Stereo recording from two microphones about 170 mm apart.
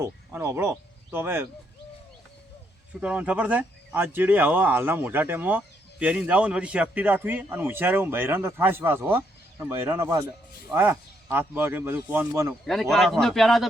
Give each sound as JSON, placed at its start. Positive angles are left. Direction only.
{"t": 0.0, "sound": "speech", "side_deg": -15}
{"t": 3.0, "sound": "speech", "side_deg": -5}
{"t": 12.6, "sound": "speech", "side_deg": 0}